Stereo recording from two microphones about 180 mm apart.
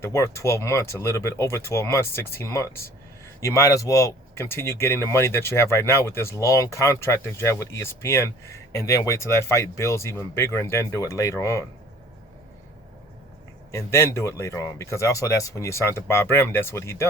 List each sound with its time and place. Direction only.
0.0 s speech: 15° left (ahead or behind)
13.7 s speech: 15° left (ahead or behind)